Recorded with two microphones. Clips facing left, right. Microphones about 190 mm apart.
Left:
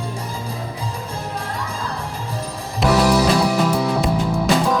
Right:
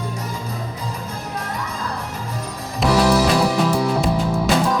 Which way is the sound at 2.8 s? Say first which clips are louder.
Even; centre (ahead or behind).